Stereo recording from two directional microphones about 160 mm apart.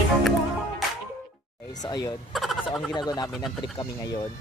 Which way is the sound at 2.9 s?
25° left (ahead or behind).